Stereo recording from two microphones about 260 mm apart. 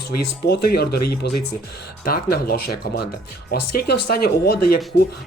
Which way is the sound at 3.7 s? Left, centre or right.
Left.